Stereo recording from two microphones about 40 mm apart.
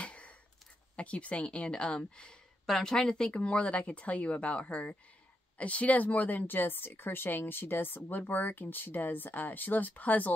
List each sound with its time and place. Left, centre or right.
0.0 s a sound: left
0.9 s speech: left
2.6 s speech: centre; by 10.3 s left